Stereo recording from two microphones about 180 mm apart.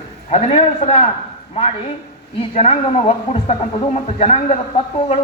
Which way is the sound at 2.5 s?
35° left (ahead or behind).